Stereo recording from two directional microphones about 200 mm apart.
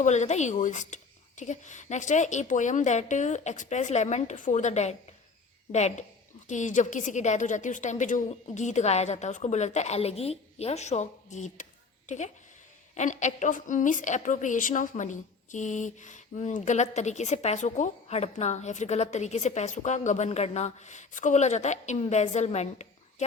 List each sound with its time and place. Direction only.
0.0 s a woman's voice: 35° left (ahead or behind)